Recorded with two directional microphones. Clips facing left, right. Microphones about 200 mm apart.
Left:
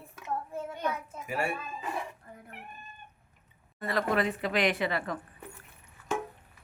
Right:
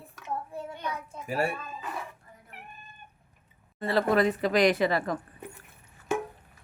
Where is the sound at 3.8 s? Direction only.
30° right (ahead or behind).